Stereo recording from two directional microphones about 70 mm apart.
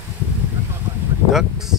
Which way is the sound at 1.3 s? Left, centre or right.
Centre.